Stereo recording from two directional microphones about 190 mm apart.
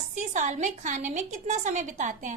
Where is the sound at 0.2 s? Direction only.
40° right (ahead or behind).